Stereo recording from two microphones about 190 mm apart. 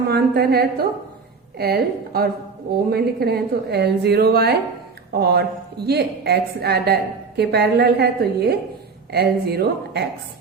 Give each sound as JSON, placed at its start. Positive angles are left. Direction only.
{"t": 0.1, "sound": "a woman's voice", "side_deg": -55}